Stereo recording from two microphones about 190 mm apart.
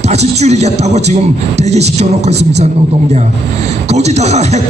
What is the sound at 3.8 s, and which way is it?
Speech, 35° right (ahead or behind).